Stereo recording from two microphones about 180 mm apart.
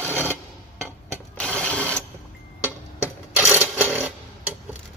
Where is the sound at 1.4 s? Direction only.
5° left (ahead or behind).